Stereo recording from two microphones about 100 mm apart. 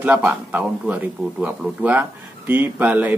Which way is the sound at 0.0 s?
15° right (ahead or behind).